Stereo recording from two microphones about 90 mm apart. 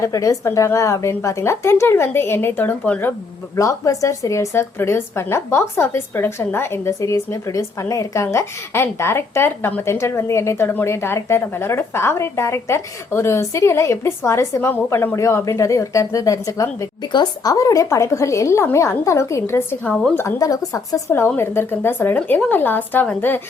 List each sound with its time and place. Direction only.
0.0 s a woman's voice: 40° left (ahead or behind); by 3.6 s 20° left (ahead or behind)
3.6 s a woman's voice: 35° left (ahead or behind)
19.8 s a woman's voice: 10° left (ahead or behind)
20.4 s a woman's voice: 40° left (ahead or behind)
21.3 s speech: 25° left (ahead or behind)